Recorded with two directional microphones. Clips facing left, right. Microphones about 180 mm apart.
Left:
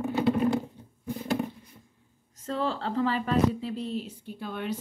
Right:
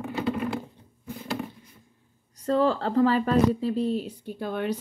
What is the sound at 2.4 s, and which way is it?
A woman's voice, 40° right (ahead or behind).